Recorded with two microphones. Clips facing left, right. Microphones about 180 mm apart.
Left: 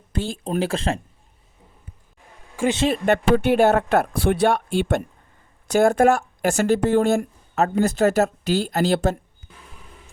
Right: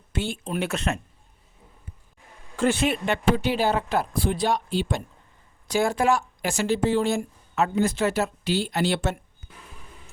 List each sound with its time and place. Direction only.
0.2 s speech: 35° left (ahead or behind)
2.6 s speech: 20° left (ahead or behind)
3.1 s speech: 55° left (ahead or behind); by 9.1 s 40° left (ahead or behind)